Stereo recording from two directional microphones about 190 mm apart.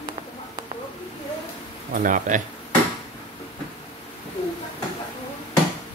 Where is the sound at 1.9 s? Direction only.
45° right (ahead or behind).